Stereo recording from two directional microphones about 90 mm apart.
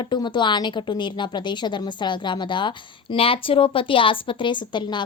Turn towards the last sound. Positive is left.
turn(degrees=60)  # may be behind; listen again after turning